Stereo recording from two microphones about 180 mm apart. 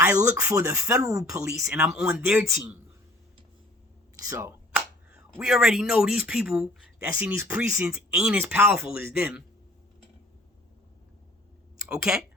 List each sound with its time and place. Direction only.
0.1 s speech: 15° right (ahead or behind)
1.7 s speech: centre (ahead or behind)
4.3 s finger snapping: 15° right (ahead or behind)
5.3 s speech: centre (ahead or behind)
11.9 s speech: centre (ahead or behind)